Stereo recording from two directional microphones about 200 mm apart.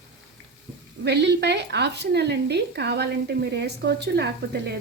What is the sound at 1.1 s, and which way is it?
A woman's voice, 55° right (ahead or behind).